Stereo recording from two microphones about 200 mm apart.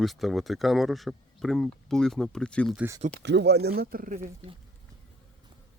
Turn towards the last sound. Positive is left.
turn(degrees=-40)  # may be behind; listen again after turning